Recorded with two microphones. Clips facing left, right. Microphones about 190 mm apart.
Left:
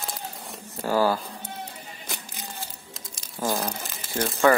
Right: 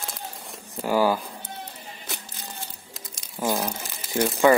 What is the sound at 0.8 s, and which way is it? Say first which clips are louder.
Speech: right 1 dB; 15° right (ahead or behind).